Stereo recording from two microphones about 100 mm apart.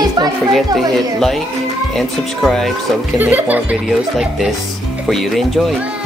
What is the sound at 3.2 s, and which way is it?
Speech, 20° right (ahead or behind).